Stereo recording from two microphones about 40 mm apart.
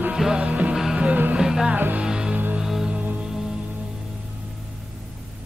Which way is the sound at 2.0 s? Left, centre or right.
Centre.